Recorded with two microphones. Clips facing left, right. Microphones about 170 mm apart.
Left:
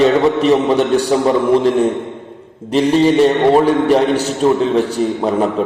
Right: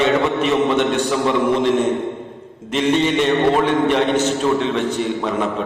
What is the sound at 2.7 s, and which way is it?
A man's voice, 35° left (ahead or behind).